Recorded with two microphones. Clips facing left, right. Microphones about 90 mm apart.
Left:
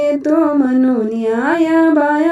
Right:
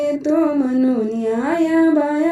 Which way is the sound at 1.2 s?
65° left (ahead or behind).